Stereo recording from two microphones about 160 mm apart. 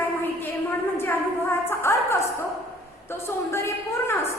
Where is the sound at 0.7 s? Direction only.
15° left (ahead or behind).